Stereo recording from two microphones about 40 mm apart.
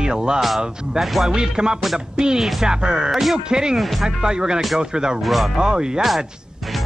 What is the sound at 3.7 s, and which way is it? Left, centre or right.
Speech, centre.